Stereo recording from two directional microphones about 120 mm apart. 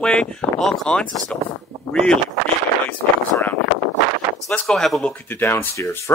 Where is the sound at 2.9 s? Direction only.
15° left (ahead or behind).